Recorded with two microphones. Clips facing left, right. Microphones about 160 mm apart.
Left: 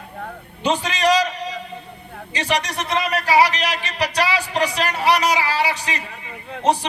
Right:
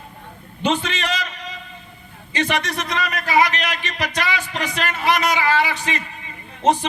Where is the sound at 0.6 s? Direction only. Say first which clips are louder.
Left 2 dB; 40° left (ahead or behind).